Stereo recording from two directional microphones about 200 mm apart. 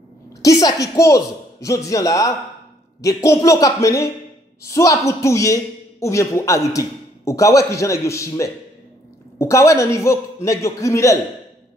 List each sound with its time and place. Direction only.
0.4 s a man's voice: 20° left (ahead or behind)